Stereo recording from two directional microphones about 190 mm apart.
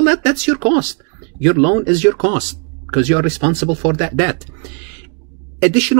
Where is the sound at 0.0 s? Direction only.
35° right (ahead or behind).